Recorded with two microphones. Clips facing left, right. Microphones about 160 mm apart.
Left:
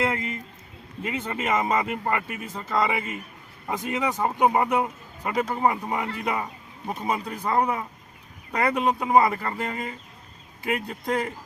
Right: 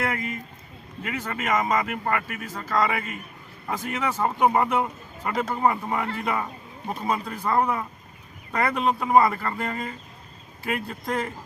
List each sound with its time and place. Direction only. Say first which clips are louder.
0.0 s speech: left 2 dB; 25° left (ahead or behind)